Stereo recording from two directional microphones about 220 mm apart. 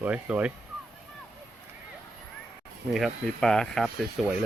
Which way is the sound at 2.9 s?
Centre (ahead or behind).